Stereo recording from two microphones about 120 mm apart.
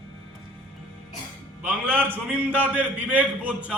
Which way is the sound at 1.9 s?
15° right (ahead or behind).